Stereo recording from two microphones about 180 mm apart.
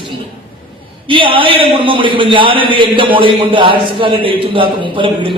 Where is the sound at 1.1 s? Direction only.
30° right (ahead or behind).